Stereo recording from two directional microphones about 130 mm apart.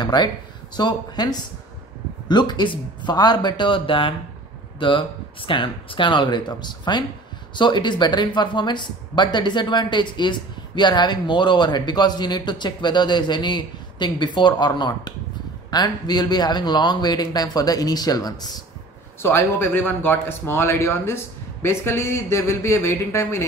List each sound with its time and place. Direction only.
0.0 s speech: 35° left (ahead or behind)
19.2 s speech: 15° left (ahead or behind)